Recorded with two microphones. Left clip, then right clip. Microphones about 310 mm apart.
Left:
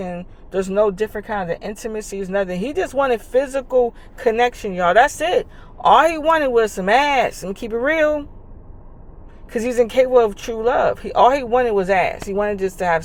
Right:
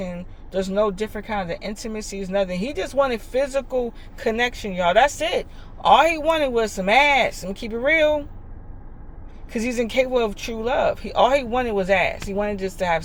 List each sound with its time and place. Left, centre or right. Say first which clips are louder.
0.0 s speech: left 3 dB; centre
9.6 s speech: left 6 dB; centre